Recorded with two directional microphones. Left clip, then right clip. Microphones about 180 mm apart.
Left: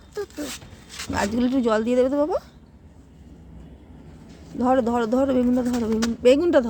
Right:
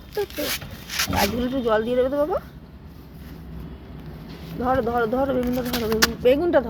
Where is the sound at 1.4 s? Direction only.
65° left (ahead or behind).